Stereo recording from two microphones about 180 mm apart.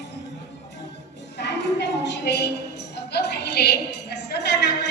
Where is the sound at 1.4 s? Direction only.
70° left (ahead or behind).